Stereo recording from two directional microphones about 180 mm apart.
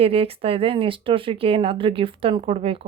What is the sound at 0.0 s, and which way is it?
Speech, 30° right (ahead or behind).